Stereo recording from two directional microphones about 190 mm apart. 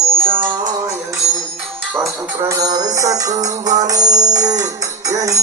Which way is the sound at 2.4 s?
20° right (ahead or behind).